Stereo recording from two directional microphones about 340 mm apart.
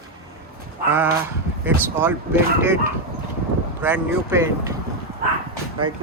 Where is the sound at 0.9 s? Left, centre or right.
Centre.